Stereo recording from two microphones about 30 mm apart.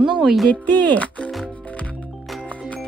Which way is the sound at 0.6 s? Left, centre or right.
Left.